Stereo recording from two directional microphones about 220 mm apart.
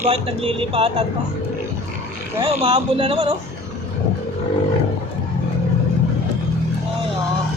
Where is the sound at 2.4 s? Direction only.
25° right (ahead or behind).